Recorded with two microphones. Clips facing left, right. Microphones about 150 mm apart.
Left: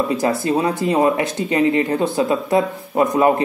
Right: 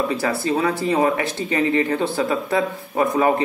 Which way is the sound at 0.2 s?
20° left (ahead or behind).